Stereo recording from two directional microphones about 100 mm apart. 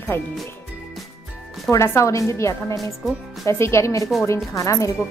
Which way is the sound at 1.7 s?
30° left (ahead or behind).